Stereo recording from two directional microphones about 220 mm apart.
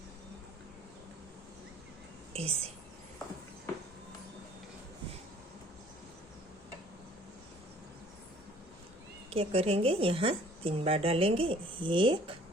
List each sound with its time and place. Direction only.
2.3 s speech: 25° right (ahead or behind)
9.3 s a woman's voice: 25° right (ahead or behind)